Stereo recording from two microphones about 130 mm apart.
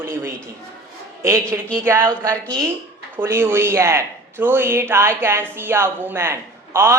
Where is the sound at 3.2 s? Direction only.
20° right (ahead or behind).